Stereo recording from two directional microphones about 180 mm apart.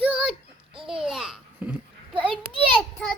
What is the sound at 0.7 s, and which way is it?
Babbling, 30° right (ahead or behind).